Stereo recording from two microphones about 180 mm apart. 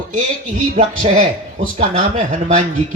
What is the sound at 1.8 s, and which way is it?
Speech, 45° right (ahead or behind).